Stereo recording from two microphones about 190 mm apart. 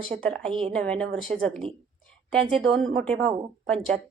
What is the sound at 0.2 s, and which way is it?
Speech, 5° left (ahead or behind).